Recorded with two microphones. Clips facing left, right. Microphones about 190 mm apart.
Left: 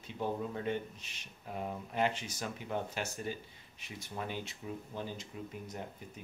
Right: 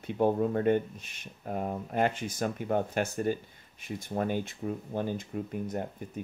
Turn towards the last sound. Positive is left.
turn(degrees=-55)  # may be behind; listen again after turning